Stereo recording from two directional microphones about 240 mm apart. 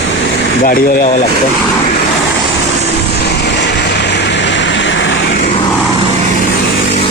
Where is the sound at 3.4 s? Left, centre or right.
Left.